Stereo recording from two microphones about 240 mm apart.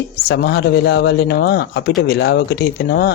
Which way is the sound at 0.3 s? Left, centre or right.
Left.